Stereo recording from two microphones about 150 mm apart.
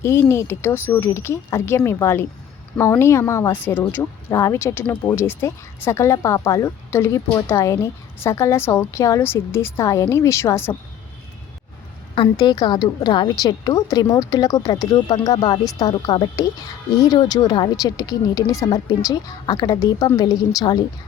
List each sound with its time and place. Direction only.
0.0 s speech: 15° left (ahead or behind)
12.1 s speech: 30° left (ahead or behind)